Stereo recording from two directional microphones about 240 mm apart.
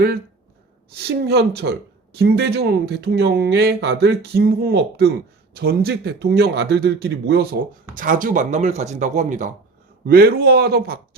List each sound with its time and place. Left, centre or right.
0.9 s a man's voice: right